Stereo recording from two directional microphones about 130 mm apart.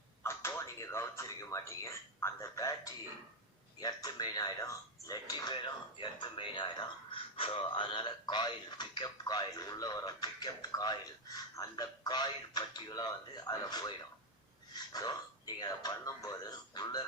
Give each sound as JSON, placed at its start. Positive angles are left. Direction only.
{"t": 0.2, "sound": "a man's voice", "side_deg": 20}